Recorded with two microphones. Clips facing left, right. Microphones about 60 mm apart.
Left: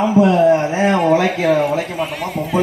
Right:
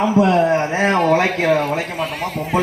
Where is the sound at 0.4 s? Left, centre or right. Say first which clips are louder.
Left 4 dB; right.